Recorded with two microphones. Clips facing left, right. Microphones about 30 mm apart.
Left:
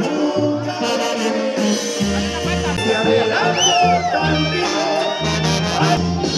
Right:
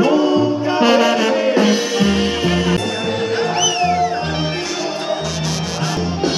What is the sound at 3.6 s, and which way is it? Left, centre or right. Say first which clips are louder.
Music: left 5 dB; centre.